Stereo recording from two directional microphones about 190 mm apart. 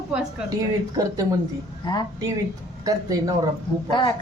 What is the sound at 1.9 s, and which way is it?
Speech, 25° left (ahead or behind).